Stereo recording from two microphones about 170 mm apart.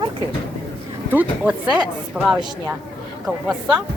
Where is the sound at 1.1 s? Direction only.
10° right (ahead or behind).